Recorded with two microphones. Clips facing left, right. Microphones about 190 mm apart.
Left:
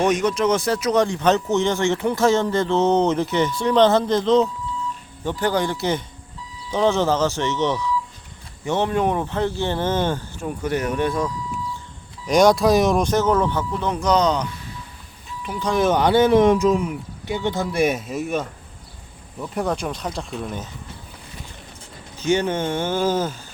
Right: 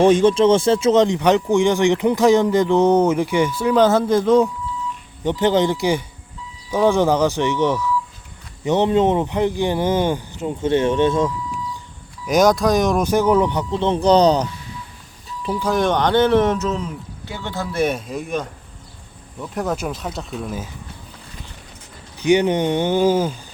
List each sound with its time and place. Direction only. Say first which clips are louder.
0.0 s speech: right 6 dB; 30° right (ahead or behind); by 4.4 s 10° right (ahead or behind)
5.2 s speech: right 5 dB; 20° right (ahead or behind)
12.3 s speech: even; centre (ahead or behind); by 14.4 s 35° right (ahead or behind)
15.6 s speech: left 1 dB; centre (ahead or behind)
22.2 s speech: right 5 dB; 15° right (ahead or behind)